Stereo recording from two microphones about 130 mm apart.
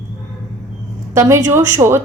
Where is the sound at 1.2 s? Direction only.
20° right (ahead or behind).